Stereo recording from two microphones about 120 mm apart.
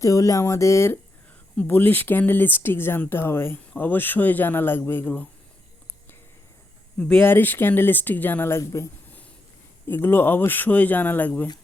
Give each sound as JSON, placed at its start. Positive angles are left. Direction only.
{"t": 0.0, "sound": "speech", "side_deg": 25}
{"t": 7.2, "sound": "speech", "side_deg": 15}